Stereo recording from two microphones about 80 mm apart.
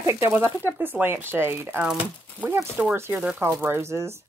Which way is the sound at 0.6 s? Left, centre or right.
Right.